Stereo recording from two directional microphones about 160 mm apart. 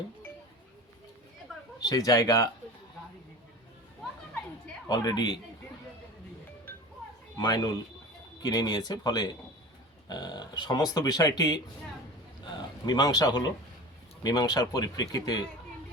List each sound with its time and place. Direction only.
1.8 s speech: 20° left (ahead or behind)
4.9 s speech: 25° left (ahead or behind)
7.4 s speech: 25° left (ahead or behind)